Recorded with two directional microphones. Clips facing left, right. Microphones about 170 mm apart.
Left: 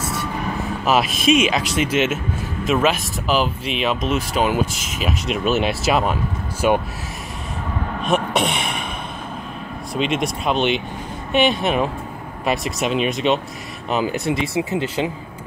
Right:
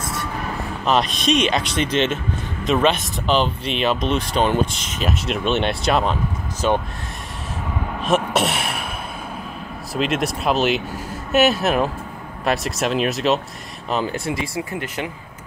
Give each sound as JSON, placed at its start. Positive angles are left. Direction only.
{"t": 0.0, "sound": "vehicle", "side_deg": 0}
{"t": 0.8, "sound": "speech", "side_deg": 5}
{"t": 8.0, "sound": "speech", "side_deg": 0}
{"t": 9.9, "sound": "speech", "side_deg": 0}
{"t": 14.1, "sound": "speech", "side_deg": 20}